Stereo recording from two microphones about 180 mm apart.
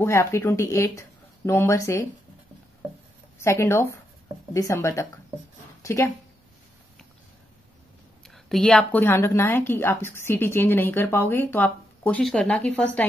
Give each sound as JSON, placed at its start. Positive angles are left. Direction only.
{"t": 0.0, "sound": "a woman's voice", "side_deg": 15}
{"t": 3.4, "sound": "a woman's voice", "side_deg": 15}
{"t": 8.3, "sound": "a woman's voice", "side_deg": 0}